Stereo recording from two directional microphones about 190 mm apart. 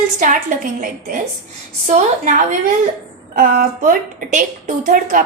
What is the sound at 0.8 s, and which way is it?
A woman's voice, 45° right (ahead or behind).